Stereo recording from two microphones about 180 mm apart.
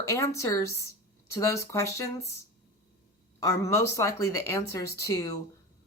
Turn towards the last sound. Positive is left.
turn(degrees=15)  # may be behind; listen again after turning